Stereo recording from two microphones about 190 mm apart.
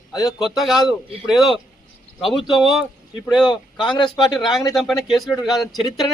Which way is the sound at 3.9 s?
25° left (ahead or behind).